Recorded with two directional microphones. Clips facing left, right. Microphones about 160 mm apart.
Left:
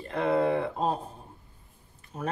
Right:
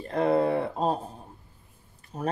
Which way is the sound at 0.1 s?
35° right (ahead or behind).